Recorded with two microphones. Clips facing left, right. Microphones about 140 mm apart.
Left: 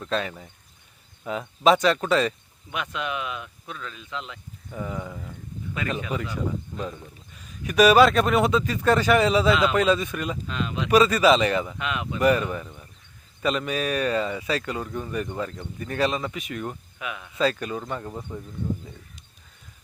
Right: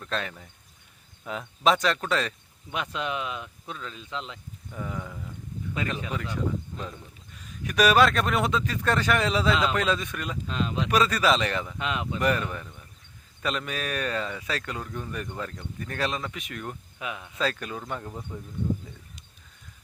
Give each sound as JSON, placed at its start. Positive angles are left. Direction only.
{"t": 0.0, "sound": "speech", "side_deg": 5}
{"t": 2.7, "sound": "speech", "side_deg": -30}
{"t": 4.7, "sound": "speech", "side_deg": 5}
{"t": 10.4, "sound": "speech", "side_deg": -30}
{"t": 10.8, "sound": "speech", "side_deg": 5}
{"t": 11.8, "sound": "speech", "side_deg": -30}
{"t": 12.2, "sound": "speech", "side_deg": 5}
{"t": 17.0, "sound": "speech", "side_deg": -30}
{"t": 17.3, "sound": "speech", "side_deg": 0}
{"t": 18.1, "sound": "speech", "side_deg": 15}